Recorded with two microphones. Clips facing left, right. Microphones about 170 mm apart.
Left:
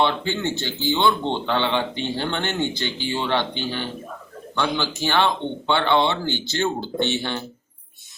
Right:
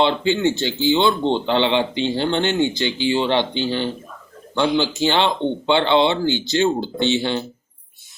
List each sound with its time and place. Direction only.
0.0 s speech: 15° right (ahead or behind)